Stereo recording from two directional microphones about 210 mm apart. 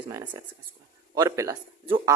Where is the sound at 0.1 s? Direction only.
15° right (ahead or behind).